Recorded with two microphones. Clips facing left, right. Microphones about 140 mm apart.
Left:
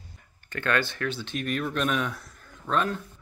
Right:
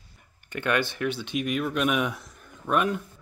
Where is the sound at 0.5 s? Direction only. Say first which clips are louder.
Right 1 dB; 15° right (ahead or behind).